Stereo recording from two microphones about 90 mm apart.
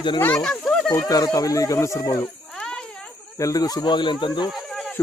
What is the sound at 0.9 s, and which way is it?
Speech, 40° left (ahead or behind).